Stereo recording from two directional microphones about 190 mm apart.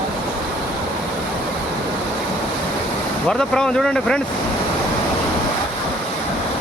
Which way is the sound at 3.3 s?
5° left (ahead or behind).